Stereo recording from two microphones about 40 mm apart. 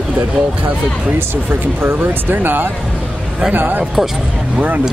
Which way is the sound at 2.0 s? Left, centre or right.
Right.